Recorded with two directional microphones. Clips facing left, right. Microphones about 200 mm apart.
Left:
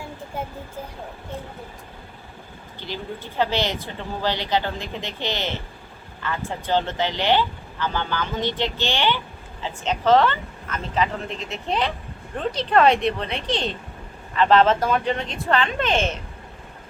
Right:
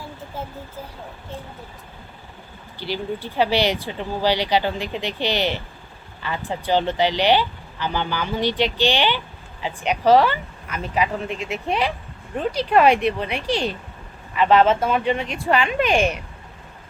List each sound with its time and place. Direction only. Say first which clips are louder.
2.7 s speech: right 5 dB; 20° left (ahead or behind)
3.3 s speech: right 3 dB; 15° right (ahead or behind)